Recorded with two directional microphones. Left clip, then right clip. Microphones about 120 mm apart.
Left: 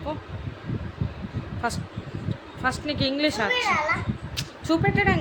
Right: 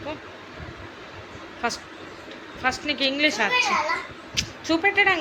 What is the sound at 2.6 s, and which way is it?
A woman's voice, 50° left (ahead or behind).